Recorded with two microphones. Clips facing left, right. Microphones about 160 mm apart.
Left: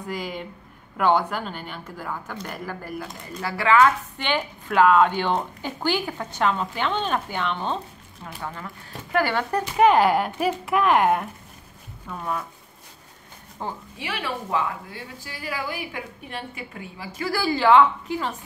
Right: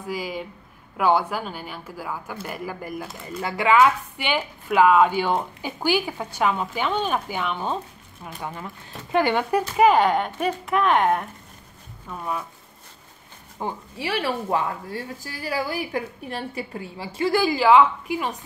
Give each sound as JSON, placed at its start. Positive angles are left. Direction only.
{"t": 0.0, "sound": "speech", "side_deg": -5}
{"t": 13.6, "sound": "speech", "side_deg": -10}
{"t": 13.9, "sound": "speech", "side_deg": -35}